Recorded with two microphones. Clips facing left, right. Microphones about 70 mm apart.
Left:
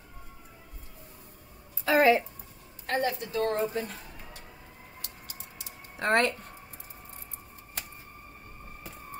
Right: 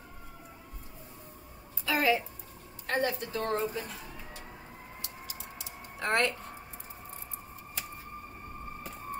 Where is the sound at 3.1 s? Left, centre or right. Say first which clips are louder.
Left 4 dB; right.